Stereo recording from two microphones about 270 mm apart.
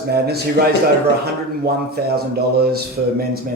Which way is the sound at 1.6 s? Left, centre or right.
Right.